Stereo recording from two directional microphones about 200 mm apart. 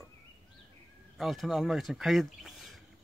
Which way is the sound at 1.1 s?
Centre (ahead or behind).